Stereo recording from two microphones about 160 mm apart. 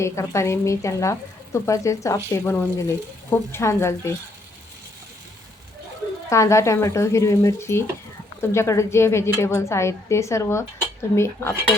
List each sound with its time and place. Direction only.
0.0 s speech: 15° left (ahead or behind)
6.3 s speech: 20° left (ahead or behind)